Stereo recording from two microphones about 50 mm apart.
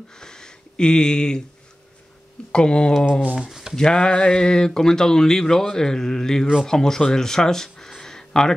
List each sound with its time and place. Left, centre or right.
0.1 s a sound: centre
2.5 s speech: centre
3.1 s speech: centre
3.3 s speech: centre
3.7 s speech: centre